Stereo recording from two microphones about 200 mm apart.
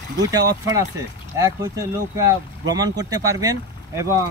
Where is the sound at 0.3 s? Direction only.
20° right (ahead or behind).